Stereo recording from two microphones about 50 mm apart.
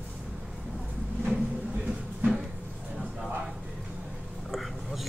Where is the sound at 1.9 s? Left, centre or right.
Centre.